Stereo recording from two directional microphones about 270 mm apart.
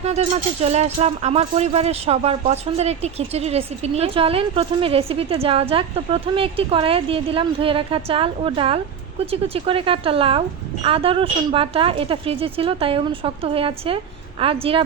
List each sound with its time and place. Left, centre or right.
0.0 s speech: right